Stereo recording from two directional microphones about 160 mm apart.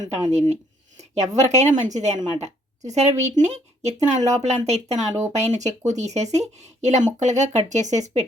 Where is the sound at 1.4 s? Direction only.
45° right (ahead or behind).